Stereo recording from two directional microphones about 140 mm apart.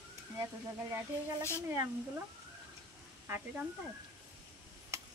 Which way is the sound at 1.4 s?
20° left (ahead or behind).